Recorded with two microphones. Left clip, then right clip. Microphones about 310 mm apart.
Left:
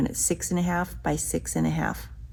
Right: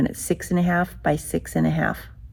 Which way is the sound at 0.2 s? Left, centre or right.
Right.